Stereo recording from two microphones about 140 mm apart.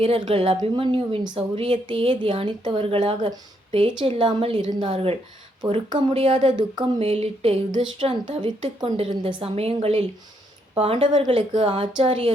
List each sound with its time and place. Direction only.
0.0 s a woman's voice: 45° right (ahead or behind)
7.0 s a woman's voice: 45° right (ahead or behind)
7.7 s a woman's voice: 35° right (ahead or behind)